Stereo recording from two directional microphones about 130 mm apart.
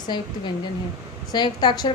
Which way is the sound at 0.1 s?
35° left (ahead or behind).